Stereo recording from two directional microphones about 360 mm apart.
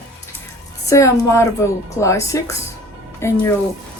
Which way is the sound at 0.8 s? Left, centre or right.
Centre.